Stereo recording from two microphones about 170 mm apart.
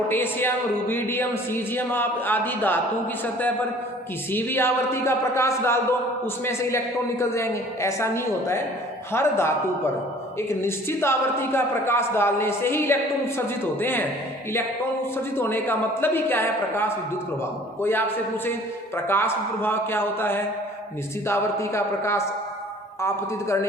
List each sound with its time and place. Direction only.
0.1 s a woman's voice: 10° left (ahead or behind)
15.1 s a woman's voice: 10° left (ahead or behind)
19.0 s a woman's voice: 15° left (ahead or behind)